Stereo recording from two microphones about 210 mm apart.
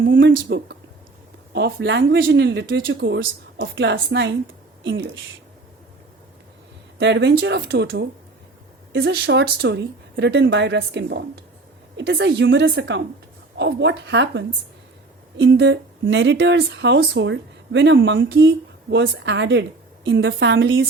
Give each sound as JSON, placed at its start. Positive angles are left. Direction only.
{"t": 0.0, "sound": "speech", "side_deg": -60}
{"t": 7.0, "sound": "speech", "side_deg": -60}